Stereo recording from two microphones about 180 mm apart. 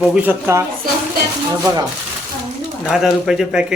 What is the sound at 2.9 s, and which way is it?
Speech, 5° right (ahead or behind).